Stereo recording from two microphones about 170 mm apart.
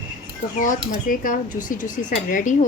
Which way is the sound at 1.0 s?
50° left (ahead or behind).